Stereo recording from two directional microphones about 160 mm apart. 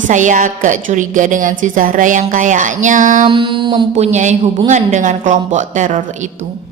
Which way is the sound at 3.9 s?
45° right (ahead or behind).